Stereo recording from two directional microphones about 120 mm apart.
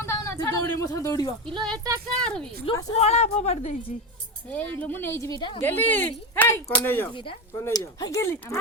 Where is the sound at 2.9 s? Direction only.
65° left (ahead or behind).